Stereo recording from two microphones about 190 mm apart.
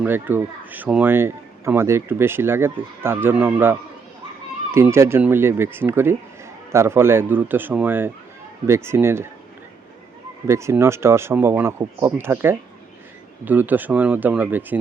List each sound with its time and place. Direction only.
0.0 s speech: 10° right (ahead or behind)
10.4 s speech: 15° right (ahead or behind)